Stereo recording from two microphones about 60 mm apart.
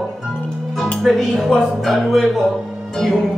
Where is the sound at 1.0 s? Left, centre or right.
Centre.